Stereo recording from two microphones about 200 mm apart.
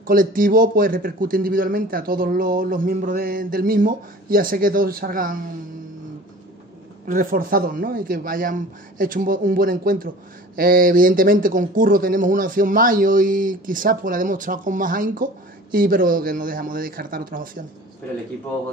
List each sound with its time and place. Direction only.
0.0 s a man's voice: 45° right (ahead or behind)
7.1 s a man's voice: 45° right (ahead or behind)